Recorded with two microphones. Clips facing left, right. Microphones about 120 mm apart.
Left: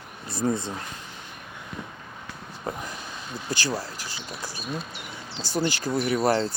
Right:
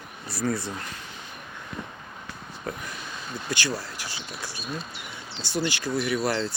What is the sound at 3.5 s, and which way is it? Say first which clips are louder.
Speech: left 1 dB; 40° left (ahead or behind).